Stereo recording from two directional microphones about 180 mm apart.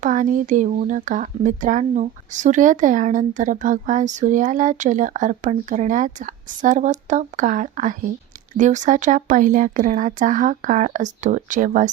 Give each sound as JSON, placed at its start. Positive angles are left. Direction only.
{"t": 0.0, "sound": "speech", "side_deg": -45}